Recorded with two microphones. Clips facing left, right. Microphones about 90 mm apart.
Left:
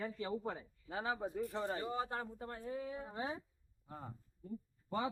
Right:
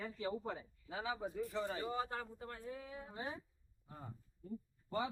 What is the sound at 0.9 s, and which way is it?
Speech, 40° left (ahead or behind).